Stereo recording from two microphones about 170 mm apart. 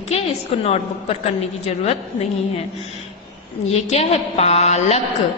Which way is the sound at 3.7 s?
40° left (ahead or behind).